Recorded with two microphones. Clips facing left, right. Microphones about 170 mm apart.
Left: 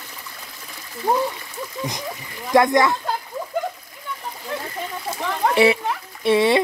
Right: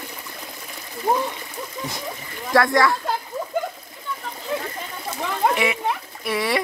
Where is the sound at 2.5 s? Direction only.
20° left (ahead or behind).